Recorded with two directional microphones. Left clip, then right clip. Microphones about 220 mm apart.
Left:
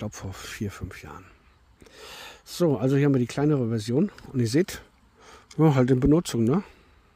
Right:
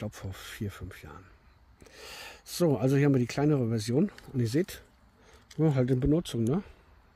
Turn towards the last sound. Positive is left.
turn(degrees=35)  # may be behind; listen again after turning